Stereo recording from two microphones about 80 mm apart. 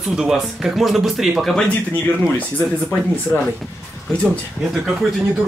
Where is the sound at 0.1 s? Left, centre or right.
Centre.